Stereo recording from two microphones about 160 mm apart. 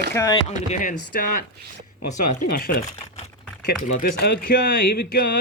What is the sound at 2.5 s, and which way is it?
Speech, 70° left (ahead or behind).